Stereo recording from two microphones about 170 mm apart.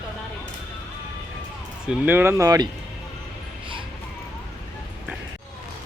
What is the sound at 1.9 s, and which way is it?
Speech, 10° right (ahead or behind).